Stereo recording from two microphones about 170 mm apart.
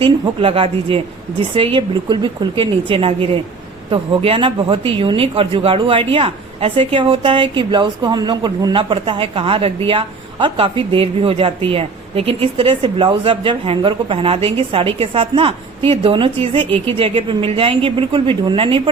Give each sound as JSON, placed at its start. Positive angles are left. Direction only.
{"t": 0.0, "sound": "a woman's voice", "side_deg": -30}